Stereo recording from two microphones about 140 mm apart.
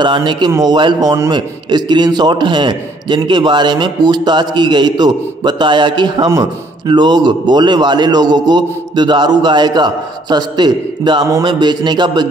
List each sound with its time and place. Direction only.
0.0 s a man's voice: 35° right (ahead or behind)